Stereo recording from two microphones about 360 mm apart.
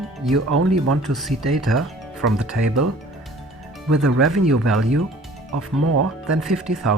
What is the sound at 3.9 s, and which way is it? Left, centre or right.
Speech, right.